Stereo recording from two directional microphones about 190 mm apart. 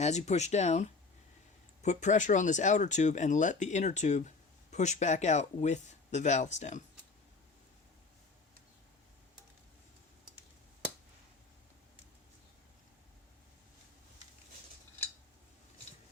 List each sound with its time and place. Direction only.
0.0 s speech: 35° left (ahead or behind)